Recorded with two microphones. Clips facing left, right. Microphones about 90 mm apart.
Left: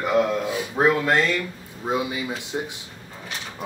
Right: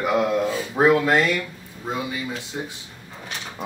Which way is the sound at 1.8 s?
20° left (ahead or behind).